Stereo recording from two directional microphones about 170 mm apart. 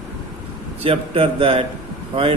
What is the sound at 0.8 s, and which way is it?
Speech, 35° right (ahead or behind).